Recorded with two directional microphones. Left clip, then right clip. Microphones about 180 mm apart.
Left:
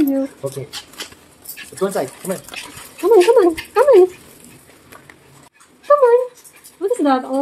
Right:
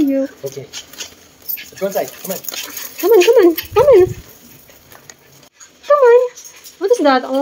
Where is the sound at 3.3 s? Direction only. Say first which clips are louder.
Right 2 dB; 20° right (ahead or behind).